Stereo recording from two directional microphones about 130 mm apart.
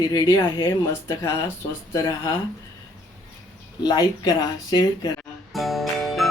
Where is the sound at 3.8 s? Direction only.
30° left (ahead or behind).